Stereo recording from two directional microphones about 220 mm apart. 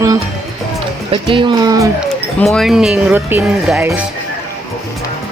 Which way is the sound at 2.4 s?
Centre (ahead or behind).